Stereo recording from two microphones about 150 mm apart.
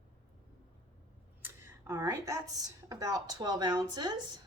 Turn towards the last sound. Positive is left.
turn(degrees=-25)  # may be behind; listen again after turning